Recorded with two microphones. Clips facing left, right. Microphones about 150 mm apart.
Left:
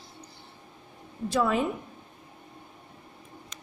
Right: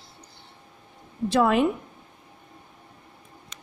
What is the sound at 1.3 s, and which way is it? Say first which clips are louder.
Speech: right 5 dB; 75° right (ahead or behind).